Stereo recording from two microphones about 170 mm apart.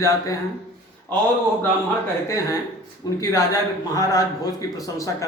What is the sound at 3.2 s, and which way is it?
A man's voice, 20° left (ahead or behind).